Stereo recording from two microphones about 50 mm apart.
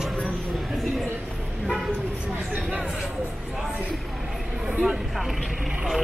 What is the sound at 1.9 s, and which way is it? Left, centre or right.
Vehicle, right.